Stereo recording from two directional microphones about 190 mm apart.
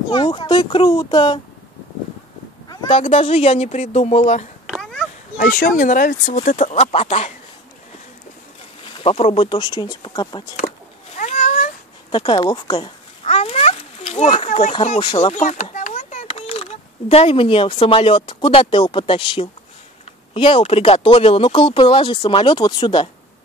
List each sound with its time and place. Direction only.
0.1 s speech: 25° left (ahead or behind)
2.7 s a sound: 20° left (ahead or behind)
3.0 s speech: 30° left (ahead or behind)
4.6 s a sound: centre (ahead or behind)
5.4 s speech: 45° left (ahead or behind)
8.8 s speech: 30° left (ahead or behind)
11.1 s cat: 40° left (ahead or behind)
12.1 s a sound: 25° left (ahead or behind)
15.1 s speech: 35° left (ahead or behind)